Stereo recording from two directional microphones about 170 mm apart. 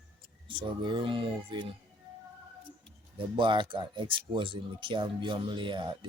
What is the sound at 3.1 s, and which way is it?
Speech, 30° right (ahead or behind).